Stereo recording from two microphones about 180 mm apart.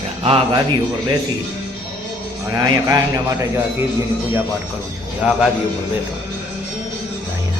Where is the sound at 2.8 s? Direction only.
20° right (ahead or behind).